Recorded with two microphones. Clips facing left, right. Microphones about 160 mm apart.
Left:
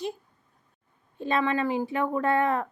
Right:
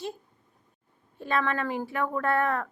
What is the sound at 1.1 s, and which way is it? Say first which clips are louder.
A woman's voice: left 2 dB; 20° left (ahead or behind).